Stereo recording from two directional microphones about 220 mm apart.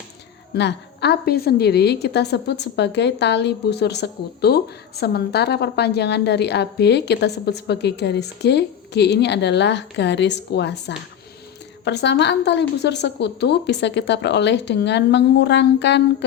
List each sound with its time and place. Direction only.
0.5 s a woman's voice: 50° left (ahead or behind)